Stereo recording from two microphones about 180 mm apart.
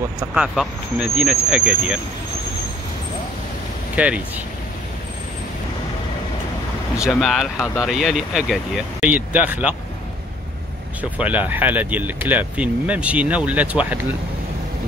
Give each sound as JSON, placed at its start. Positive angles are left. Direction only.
{"t": 0.2, "sound": "speech", "side_deg": -5}
{"t": 3.9, "sound": "speech", "side_deg": -5}
{"t": 7.0, "sound": "speech", "side_deg": 0}
{"t": 7.5, "sound": "speech", "side_deg": 15}
{"t": 7.8, "sound": "speech", "side_deg": 0}
{"t": 11.0, "sound": "speech", "side_deg": -10}